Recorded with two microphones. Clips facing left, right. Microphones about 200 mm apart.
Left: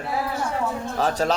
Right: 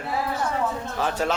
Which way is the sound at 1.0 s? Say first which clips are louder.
Left 3 dB; 35° left (ahead or behind).